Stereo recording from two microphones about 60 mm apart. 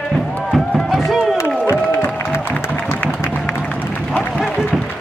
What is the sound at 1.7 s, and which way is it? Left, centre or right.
Music, left.